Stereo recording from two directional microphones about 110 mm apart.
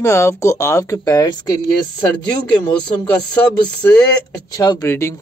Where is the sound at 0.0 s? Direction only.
25° left (ahead or behind).